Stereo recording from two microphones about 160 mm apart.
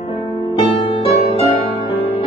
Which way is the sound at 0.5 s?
35° left (ahead or behind).